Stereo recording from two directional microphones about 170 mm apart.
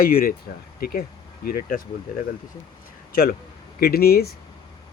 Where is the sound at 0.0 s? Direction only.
60° left (ahead or behind).